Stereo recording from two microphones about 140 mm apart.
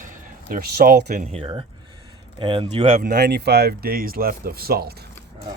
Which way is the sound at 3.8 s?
90° right.